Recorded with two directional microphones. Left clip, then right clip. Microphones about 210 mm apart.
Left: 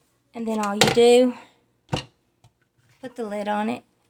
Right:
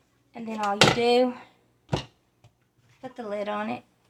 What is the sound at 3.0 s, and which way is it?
Speech, 55° left (ahead or behind).